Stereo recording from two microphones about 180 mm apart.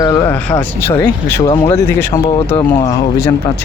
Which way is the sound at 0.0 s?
15° left (ahead or behind).